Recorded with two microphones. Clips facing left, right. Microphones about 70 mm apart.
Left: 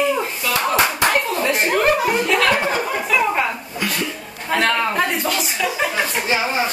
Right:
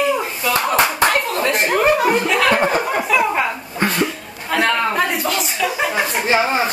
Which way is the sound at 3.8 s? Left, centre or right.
Right.